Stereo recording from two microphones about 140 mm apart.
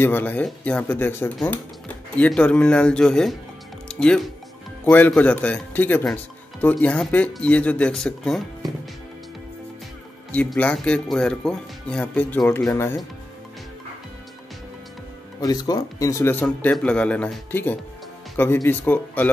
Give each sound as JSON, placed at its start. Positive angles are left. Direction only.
{"t": 0.0, "sound": "speech", "side_deg": 15}
{"t": 10.3, "sound": "speech", "side_deg": 10}
{"t": 15.4, "sound": "speech", "side_deg": 25}